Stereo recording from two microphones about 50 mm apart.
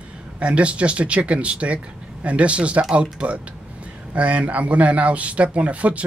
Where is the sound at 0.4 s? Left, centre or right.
Right.